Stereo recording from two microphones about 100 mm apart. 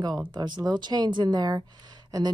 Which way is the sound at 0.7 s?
45° right (ahead or behind).